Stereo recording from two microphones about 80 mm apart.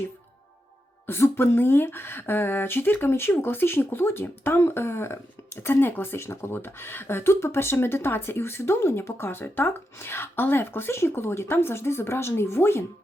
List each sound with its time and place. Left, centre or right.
1.0 s speech: left